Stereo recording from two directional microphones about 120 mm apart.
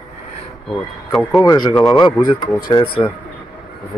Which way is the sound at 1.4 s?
35° left (ahead or behind).